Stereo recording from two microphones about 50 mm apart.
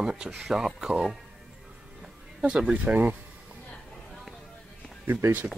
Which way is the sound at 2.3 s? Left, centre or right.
Centre.